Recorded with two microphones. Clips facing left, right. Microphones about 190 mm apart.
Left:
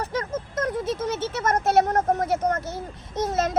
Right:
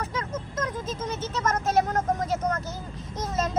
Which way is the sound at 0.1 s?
65° left (ahead or behind).